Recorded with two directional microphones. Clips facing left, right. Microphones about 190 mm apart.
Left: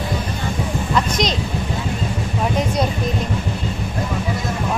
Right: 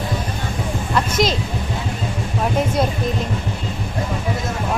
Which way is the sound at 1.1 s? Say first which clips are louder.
Right 2 dB; 5° right (ahead or behind).